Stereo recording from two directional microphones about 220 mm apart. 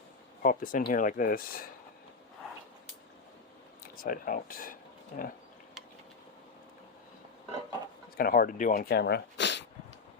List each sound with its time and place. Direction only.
0.4 s speech: 40° left (ahead or behind)
3.9 s speech: 40° left (ahead or behind)
8.1 s speech: 40° left (ahead or behind)